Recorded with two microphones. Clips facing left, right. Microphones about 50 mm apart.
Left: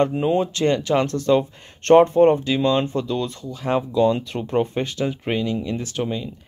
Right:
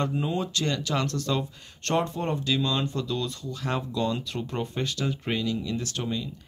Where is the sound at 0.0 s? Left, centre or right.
Left.